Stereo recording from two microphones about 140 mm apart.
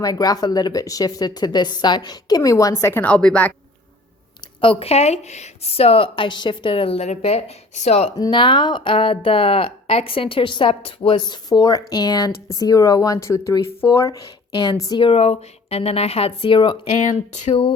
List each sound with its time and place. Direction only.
0.0 s a woman's voice: 25° left (ahead or behind); by 3.5 s 5° left (ahead or behind)
4.6 s a woman's voice: 40° left (ahead or behind)
8.2 s a woman's voice: 35° left (ahead or behind)
14.5 s speech: 30° left (ahead or behind)
15.0 s a woman's voice: 45° left (ahead or behind)
16.9 s speech: 55° left (ahead or behind)